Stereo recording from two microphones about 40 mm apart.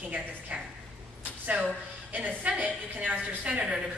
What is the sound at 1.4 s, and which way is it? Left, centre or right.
A woman's voice, right.